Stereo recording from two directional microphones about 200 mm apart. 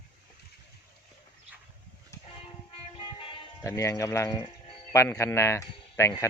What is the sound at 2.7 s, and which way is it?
Music, 25° left (ahead or behind).